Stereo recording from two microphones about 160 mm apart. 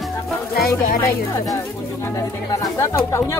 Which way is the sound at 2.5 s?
20° left (ahead or behind).